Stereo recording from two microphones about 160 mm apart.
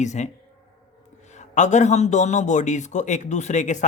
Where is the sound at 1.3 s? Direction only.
45° left (ahead or behind).